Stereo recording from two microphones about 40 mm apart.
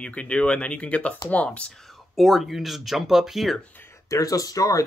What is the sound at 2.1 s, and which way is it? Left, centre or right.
Speech, centre.